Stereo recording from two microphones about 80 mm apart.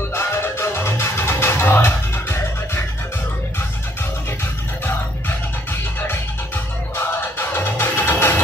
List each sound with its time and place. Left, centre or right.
0.1 s music: left
7.0 s music: left